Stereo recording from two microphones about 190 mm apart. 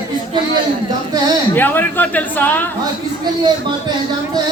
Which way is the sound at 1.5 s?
10° left (ahead or behind).